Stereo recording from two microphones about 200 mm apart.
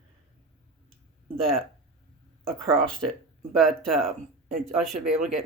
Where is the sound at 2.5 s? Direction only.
5° left (ahead or behind).